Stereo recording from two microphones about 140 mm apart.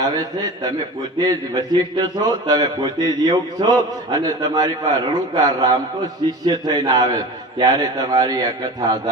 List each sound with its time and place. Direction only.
0.0 s a man's voice: 25° right (ahead or behind)